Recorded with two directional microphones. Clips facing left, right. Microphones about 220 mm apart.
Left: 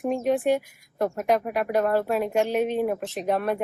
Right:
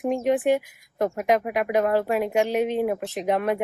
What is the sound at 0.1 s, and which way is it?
Speech, 20° right (ahead or behind).